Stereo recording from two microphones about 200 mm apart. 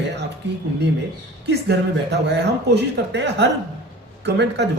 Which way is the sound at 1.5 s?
55° right (ahead or behind).